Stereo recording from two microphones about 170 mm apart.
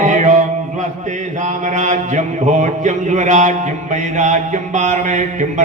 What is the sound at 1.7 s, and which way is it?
A man's voice, 45° right (ahead or behind).